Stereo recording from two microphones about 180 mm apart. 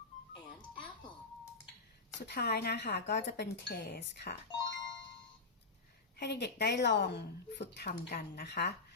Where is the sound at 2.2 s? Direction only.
65° left (ahead or behind).